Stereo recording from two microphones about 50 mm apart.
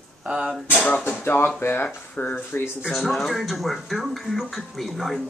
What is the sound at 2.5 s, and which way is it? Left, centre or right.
Speech, left.